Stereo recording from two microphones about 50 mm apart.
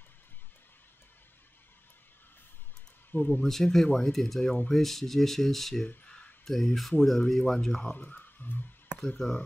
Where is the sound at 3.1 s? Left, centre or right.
Left.